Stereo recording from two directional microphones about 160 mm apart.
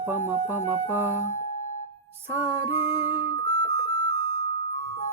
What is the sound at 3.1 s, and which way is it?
Music, 25° left (ahead or behind).